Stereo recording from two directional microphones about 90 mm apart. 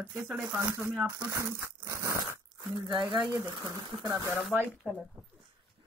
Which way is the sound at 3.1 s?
20° right (ahead or behind).